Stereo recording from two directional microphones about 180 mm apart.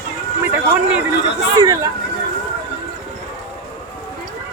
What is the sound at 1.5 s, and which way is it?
Speech, 20° right (ahead or behind).